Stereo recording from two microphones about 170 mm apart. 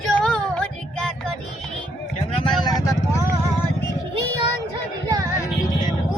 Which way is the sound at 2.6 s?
25° left (ahead or behind).